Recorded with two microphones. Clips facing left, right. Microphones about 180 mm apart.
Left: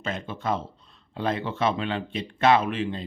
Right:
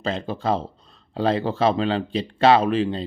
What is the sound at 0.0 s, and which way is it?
Speech, 35° right (ahead or behind).